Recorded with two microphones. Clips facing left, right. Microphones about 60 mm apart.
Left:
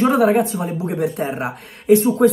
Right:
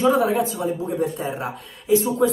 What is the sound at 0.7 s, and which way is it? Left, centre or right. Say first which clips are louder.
Speech: left 3 dB; left.